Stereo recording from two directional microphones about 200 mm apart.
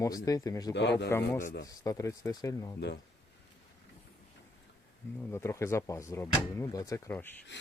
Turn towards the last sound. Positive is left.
turn(degrees=10)  # may be behind; listen again after turning